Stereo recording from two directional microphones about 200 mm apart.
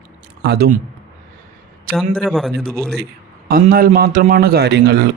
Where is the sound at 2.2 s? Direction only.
Centre (ahead or behind).